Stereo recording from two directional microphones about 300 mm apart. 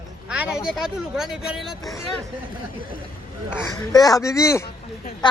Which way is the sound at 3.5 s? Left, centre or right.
Centre.